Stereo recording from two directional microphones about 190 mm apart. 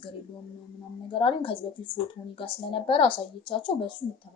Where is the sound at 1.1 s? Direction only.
25° left (ahead or behind).